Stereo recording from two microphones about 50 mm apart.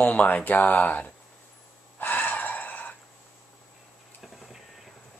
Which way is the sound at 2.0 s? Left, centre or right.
Left.